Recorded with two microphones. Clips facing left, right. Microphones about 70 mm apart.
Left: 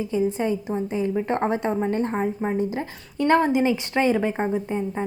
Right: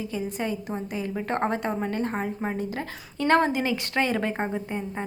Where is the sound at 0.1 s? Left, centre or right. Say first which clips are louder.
Left 9 dB; left; by 3.5 s centre.